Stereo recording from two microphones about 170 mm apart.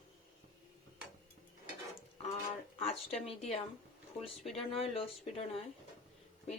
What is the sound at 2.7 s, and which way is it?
Speech, 35° left (ahead or behind).